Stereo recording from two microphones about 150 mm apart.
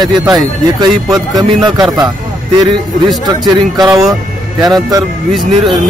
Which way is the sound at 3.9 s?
Centre (ahead or behind).